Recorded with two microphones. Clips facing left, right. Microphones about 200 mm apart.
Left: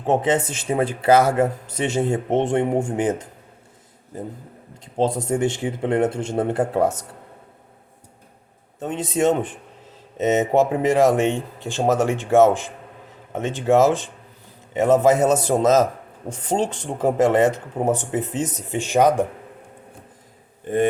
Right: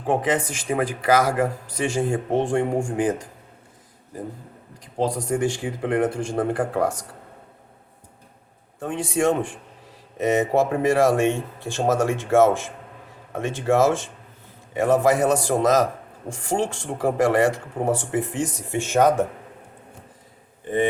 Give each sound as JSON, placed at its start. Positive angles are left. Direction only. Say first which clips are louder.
{"t": 0.0, "sound": "speech", "louder": "left 3 dB", "side_deg": 25}
{"t": 4.9, "sound": "speech", "louder": "left 2 dB", "side_deg": 25}
{"t": 8.8, "sound": "speech", "louder": "left 2 dB", "side_deg": 20}